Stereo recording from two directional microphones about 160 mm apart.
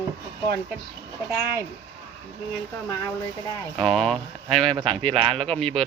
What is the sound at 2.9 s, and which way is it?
Speech, 20° left (ahead or behind).